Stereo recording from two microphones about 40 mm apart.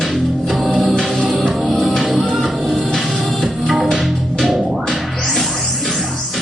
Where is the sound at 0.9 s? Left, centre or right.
Centre.